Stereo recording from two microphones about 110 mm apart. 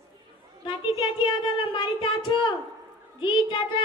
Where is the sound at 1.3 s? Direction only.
45° left (ahead or behind).